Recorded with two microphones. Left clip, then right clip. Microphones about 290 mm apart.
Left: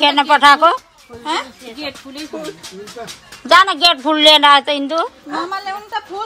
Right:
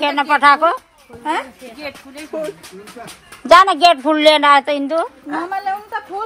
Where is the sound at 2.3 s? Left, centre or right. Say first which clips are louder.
Right 5 dB; right.